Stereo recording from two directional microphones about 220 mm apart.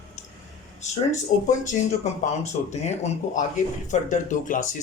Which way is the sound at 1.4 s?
35° left (ahead or behind).